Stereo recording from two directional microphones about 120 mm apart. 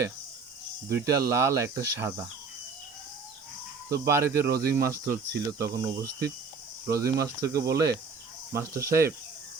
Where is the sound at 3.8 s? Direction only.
25° right (ahead or behind).